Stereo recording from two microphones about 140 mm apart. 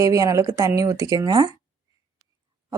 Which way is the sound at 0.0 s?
25° right (ahead or behind).